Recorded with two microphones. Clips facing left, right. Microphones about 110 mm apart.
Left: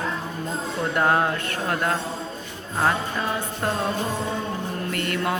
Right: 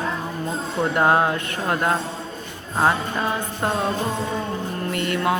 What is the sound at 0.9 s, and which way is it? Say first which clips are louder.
Mantra: right 2 dB; 10° right (ahead or behind).